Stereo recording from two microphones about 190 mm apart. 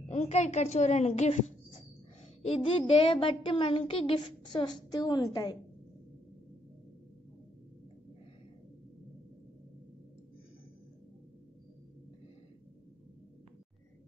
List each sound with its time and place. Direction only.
0.1 s a woman's voice: 35° left (ahead or behind)